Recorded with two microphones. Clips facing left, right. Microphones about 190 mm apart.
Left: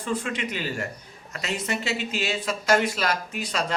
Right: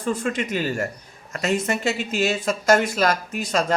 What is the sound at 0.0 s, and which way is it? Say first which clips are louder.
Speech: right 4 dB; 45° right (ahead or behind).